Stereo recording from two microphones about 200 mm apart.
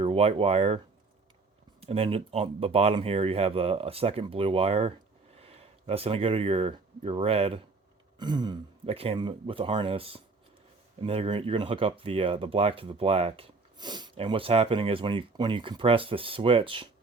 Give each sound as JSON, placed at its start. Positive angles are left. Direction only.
{"t": 0.0, "sound": "speech", "side_deg": -30}
{"t": 1.8, "sound": "speech", "side_deg": -30}